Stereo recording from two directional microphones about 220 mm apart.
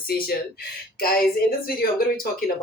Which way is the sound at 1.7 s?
40° left (ahead or behind).